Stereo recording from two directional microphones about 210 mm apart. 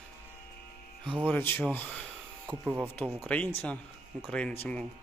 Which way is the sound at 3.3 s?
10° left (ahead or behind).